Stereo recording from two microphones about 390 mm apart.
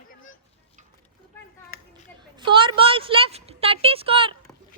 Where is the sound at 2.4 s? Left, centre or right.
Centre.